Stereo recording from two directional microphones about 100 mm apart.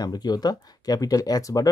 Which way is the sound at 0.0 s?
40° left (ahead or behind).